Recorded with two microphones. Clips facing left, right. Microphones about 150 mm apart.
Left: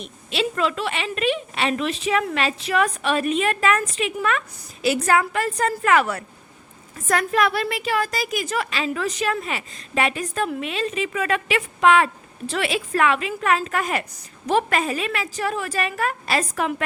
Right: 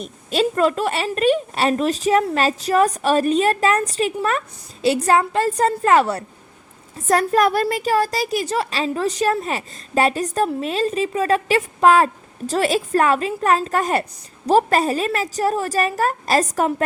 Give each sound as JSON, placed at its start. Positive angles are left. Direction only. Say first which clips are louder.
{"t": 0.0, "sound": "a woman's voice", "louder": "right 5 dB", "side_deg": -40}